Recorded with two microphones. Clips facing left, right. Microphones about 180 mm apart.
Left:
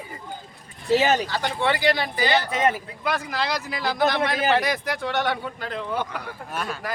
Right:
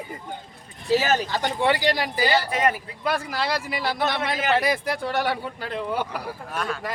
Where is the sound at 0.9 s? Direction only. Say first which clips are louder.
Left 2 dB; 20° left (ahead or behind).